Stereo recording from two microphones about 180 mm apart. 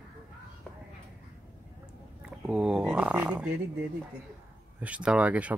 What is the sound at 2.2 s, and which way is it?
Speech, 5° right (ahead or behind).